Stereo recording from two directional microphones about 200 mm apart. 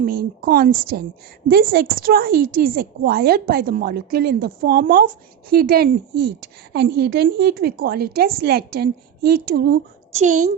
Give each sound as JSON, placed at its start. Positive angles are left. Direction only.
{"t": 0.0, "sound": "a woman's voice", "side_deg": -45}
{"t": 10.1, "sound": "a woman's voice", "side_deg": -35}